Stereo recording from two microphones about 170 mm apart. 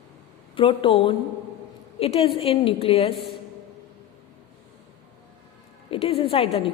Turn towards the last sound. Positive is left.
turn(degrees=35)  # may be behind; listen again after turning